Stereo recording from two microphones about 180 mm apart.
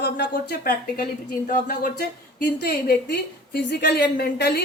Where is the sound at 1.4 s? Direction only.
50° left (ahead or behind).